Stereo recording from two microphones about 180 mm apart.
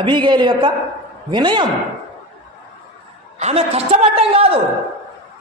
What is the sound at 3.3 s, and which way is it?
A man's voice, 35° right (ahead or behind).